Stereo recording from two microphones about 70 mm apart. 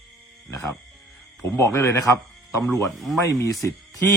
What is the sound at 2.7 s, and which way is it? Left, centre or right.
Speech, centre.